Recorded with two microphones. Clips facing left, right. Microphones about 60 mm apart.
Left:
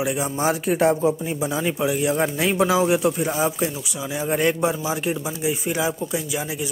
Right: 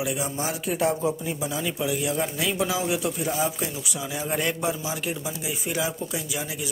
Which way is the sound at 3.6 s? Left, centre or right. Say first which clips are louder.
Left 5 dB; centre.